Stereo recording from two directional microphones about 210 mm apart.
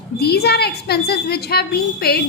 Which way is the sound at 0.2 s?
50° left (ahead or behind).